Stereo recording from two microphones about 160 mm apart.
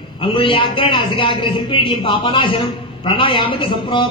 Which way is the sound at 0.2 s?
30° left (ahead or behind).